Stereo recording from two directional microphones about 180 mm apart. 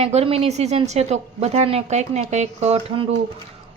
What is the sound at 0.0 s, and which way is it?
A woman's voice, 35° right (ahead or behind).